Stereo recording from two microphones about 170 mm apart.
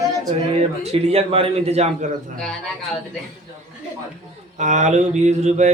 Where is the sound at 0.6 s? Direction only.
40° right (ahead or behind).